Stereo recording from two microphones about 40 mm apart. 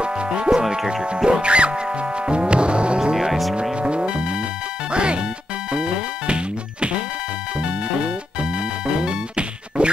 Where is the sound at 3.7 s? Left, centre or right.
Right.